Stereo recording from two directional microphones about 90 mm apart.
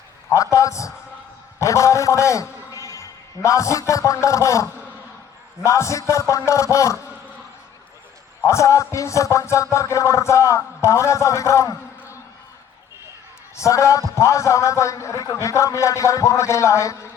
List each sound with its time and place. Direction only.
0.3 s music: 35° left (ahead or behind)
1.5 s a man's voice: 35° left (ahead or behind)
5.6 s music: 35° left (ahead or behind)
8.4 s music: 35° left (ahead or behind)
13.6 s music: 35° left (ahead or behind)